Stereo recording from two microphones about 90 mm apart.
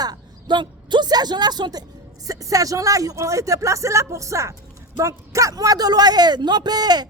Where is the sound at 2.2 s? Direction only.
40° right (ahead or behind).